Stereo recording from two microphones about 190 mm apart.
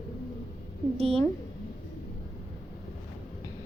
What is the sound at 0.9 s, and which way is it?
Speech, 30° right (ahead or behind).